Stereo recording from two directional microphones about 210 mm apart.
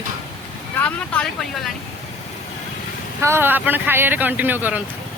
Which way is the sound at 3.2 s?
10° right (ahead or behind).